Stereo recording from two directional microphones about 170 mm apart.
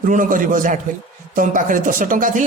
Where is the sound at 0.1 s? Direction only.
50° right (ahead or behind).